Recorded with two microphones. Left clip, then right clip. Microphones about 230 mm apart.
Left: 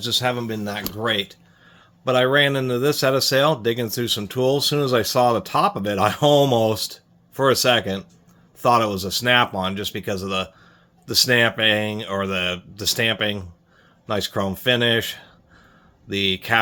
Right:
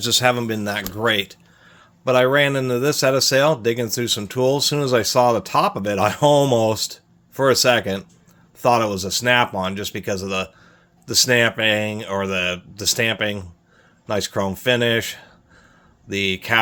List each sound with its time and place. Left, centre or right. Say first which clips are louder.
0.0 s speech: right 4 dB; right
1.6 s speech: right 2 dB; centre